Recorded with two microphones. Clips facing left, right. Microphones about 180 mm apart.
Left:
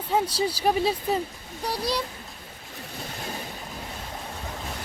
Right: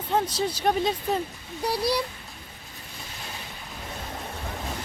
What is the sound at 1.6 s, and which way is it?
Speech, 10° right (ahead or behind).